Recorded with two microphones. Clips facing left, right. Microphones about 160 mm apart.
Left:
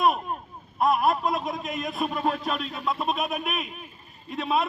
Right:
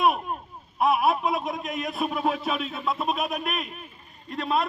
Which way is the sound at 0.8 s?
5° right (ahead or behind).